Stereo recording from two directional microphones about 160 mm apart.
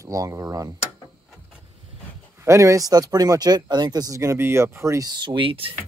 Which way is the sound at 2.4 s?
20° right (ahead or behind).